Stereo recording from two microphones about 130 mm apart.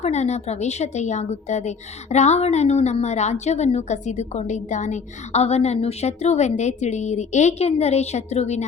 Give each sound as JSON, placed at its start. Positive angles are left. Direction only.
{"t": 0.0, "sound": "a woman's voice", "side_deg": 60}